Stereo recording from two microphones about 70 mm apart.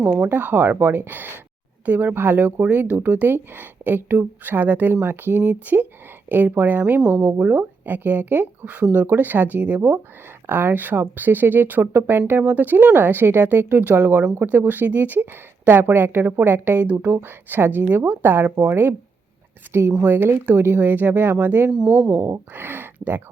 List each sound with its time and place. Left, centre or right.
0.3 s speech: right
7.0 s speech: centre
7.3 s speech: right
10.4 s speech: right
20.0 s speech: right
21.7 s speech: centre
22.1 s speech: right